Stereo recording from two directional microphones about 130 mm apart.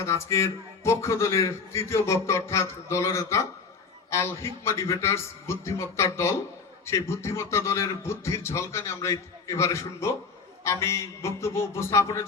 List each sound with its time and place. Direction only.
0.0 s a man's voice: 20° left (ahead or behind)